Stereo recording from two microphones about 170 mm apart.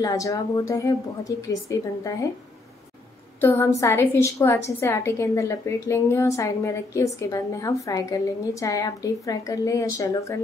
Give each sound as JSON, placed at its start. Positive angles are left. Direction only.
{"t": 0.0, "sound": "a woman's voice", "side_deg": 20}
{"t": 3.3, "sound": "a woman's voice", "side_deg": 15}